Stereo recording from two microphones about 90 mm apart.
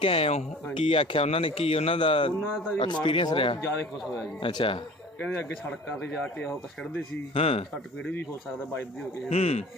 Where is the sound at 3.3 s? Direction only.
80° left.